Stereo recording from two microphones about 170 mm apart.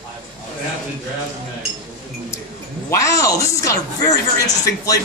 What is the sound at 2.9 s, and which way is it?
Speech, 20° left (ahead or behind).